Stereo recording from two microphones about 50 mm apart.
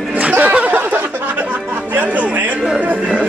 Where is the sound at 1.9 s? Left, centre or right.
Right.